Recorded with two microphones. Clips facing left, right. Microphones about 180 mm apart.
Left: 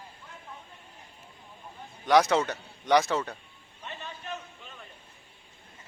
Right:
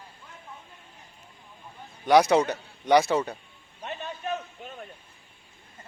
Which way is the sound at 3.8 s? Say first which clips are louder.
Right 7 dB; 55° right (ahead or behind).